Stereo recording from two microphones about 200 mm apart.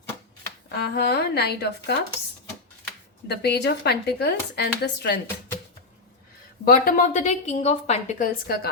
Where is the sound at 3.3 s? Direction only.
55° left (ahead or behind).